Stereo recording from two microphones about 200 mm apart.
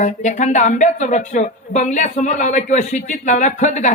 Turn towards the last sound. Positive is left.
turn(degrees=35)  # may be behind; listen again after turning